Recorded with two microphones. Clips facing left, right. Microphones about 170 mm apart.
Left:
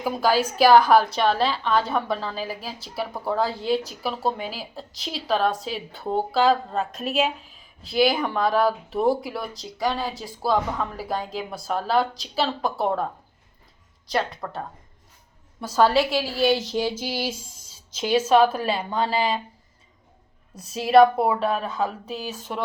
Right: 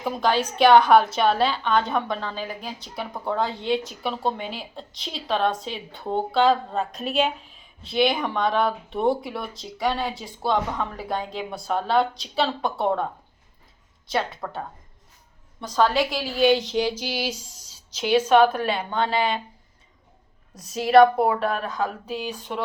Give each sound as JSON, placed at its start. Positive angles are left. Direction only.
{"t": 0.0, "sound": "a woman's voice", "side_deg": 5}
{"t": 14.1, "sound": "a woman's voice", "side_deg": 0}
{"t": 15.6, "sound": "a woman's voice", "side_deg": 5}
{"t": 16.9, "sound": "a sound", "side_deg": 10}
{"t": 17.2, "sound": "speech", "side_deg": 50}
{"t": 18.3, "sound": "a woman's voice", "side_deg": 0}
{"t": 20.7, "sound": "a woman's voice", "side_deg": 5}